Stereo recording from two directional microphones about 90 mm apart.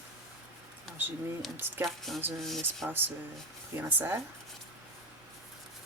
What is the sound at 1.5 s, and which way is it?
Speech, 25° right (ahead or behind).